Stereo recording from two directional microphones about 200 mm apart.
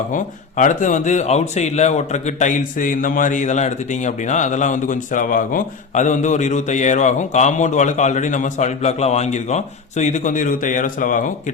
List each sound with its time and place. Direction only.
0.1 s a man's voice: 40° left (ahead or behind)